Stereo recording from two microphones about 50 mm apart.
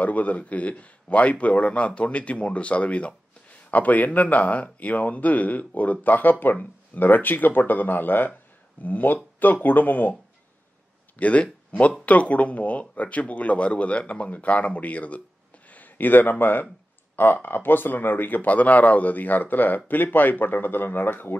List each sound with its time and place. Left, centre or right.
0.0 s speech: left
11.1 s speech: left